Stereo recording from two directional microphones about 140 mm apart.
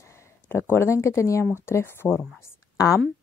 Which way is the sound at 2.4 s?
25° left (ahead or behind).